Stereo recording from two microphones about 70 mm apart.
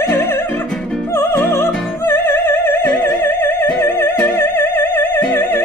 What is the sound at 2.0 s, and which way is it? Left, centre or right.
Opera, left.